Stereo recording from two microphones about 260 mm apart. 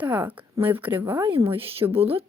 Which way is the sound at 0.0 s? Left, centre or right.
Centre.